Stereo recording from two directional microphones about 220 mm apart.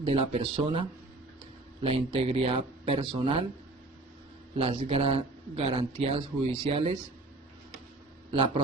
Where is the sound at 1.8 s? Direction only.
25° right (ahead or behind).